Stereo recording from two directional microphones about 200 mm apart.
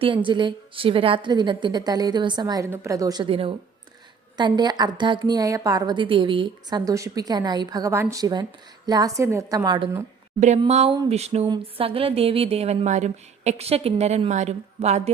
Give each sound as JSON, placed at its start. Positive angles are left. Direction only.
{"t": 0.0, "sound": "a woman's voice", "side_deg": -25}